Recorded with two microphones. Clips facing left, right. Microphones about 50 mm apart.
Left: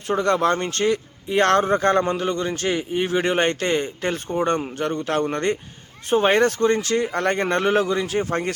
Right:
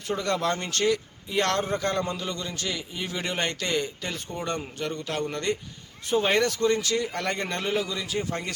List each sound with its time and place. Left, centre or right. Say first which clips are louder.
0.1 s speech: left 7 dB; left
4.0 s speech: left 10 dB; left